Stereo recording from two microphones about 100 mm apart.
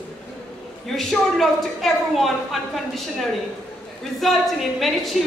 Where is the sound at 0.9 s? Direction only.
Centre (ahead or behind).